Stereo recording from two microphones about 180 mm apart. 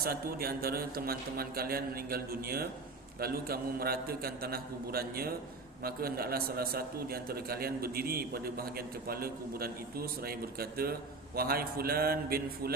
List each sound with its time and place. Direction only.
0.0 s a man's voice: 55° right (ahead or behind)